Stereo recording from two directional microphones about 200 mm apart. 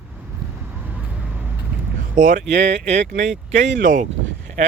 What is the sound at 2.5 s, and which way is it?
Speech, 60° right (ahead or behind).